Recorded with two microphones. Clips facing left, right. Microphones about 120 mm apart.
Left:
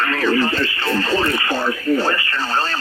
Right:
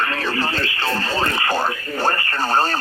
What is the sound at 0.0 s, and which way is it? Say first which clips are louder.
Radio: left 5 dB; 25° right (ahead or behind).